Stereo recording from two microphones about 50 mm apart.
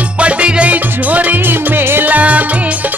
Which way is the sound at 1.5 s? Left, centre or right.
Right.